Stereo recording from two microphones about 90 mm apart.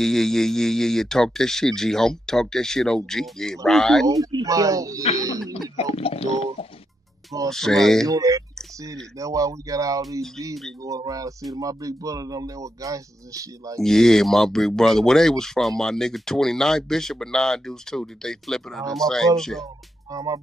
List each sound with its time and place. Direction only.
0.0 s speech: 5° left (ahead or behind)
4.3 s speech: 45° right (ahead or behind)
5.8 s a sound: 90° left
7.4 s speech: 5° left (ahead or behind)
8.1 s speech: 40° right (ahead or behind)
13.7 s speech: 5° left (ahead or behind)
19.6 s speech: 40° right (ahead or behind)